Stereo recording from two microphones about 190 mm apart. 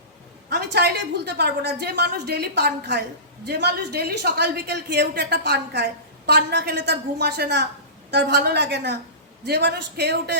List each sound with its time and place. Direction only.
0.5 s a woman's voice: 55° right (ahead or behind)